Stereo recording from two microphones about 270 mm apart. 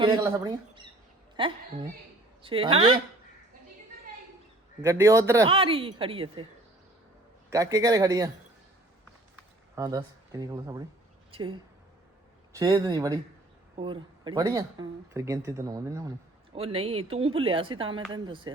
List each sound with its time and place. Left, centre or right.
0.0 s a man's voice: centre
4.8 s speech: centre
7.5 s a man's voice: centre
9.7 s a woman's voice: centre
12.5 s a man's voice: centre